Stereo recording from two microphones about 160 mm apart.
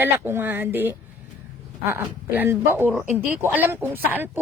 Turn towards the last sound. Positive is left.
turn(degrees=-10)  # may be behind; listen again after turning